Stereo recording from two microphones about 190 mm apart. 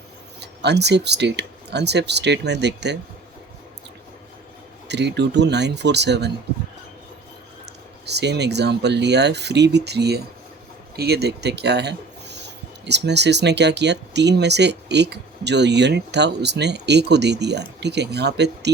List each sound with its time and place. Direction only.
0.3 s speech: 60° right (ahead or behind)
4.9 s speech: 60° right (ahead or behind)
7.6 s speech: 60° right (ahead or behind)